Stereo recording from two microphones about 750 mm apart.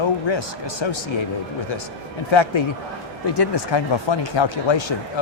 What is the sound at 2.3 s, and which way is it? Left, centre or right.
Speech, left.